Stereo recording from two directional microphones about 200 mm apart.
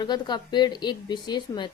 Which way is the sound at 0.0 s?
20° left (ahead or behind).